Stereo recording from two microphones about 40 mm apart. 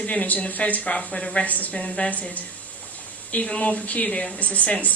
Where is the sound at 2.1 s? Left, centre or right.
Left.